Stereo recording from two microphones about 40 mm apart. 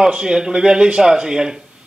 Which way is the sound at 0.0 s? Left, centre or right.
Centre.